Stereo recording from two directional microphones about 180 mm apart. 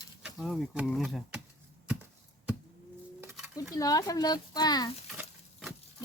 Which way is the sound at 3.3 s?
5° right (ahead or behind).